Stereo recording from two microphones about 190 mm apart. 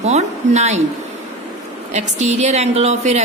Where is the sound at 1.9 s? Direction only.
35° right (ahead or behind).